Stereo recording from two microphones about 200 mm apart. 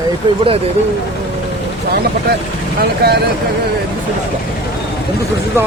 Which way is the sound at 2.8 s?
50° right (ahead or behind).